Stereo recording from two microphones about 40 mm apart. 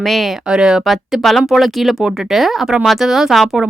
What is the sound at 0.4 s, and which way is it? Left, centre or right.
Speech, centre.